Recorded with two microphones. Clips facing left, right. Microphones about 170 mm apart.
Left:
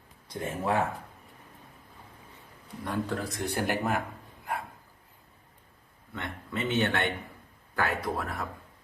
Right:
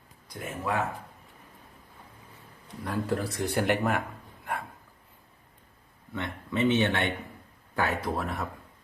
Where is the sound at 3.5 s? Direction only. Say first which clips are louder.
Right 3 dB; 40° left (ahead or behind).